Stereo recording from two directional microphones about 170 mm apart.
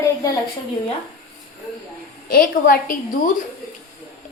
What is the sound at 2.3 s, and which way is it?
Speech, 55° left (ahead or behind).